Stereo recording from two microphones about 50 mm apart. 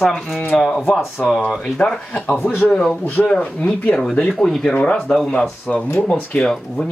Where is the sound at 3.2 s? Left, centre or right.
Centre.